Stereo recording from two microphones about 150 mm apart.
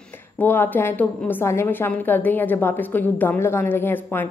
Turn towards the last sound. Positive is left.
turn(degrees=15)  # may be behind; listen again after turning